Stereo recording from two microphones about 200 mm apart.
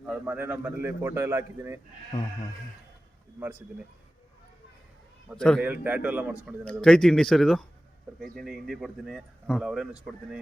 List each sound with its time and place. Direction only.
0.0 s a man's voice: 10° right (ahead or behind)
5.4 s a man's voice: 5° left (ahead or behind)
5.6 s a man's voice: 10° right (ahead or behind)
6.8 s a man's voice: 5° left (ahead or behind)